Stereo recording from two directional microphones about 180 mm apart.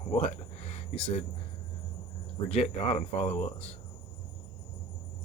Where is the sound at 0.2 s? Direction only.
40° left (ahead or behind).